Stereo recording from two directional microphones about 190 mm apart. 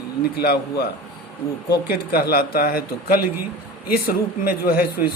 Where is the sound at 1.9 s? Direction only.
55° left (ahead or behind).